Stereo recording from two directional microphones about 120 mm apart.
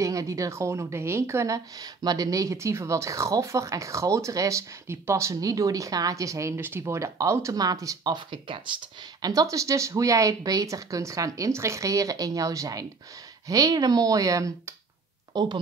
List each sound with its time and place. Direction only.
0.0 s speech: 25° right (ahead or behind)
15.3 s speech: 40° right (ahead or behind)